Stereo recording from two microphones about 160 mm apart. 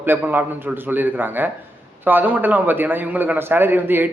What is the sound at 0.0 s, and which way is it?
A man's voice, 10° right (ahead or behind).